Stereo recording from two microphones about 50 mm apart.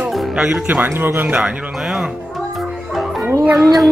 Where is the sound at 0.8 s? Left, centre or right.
Right.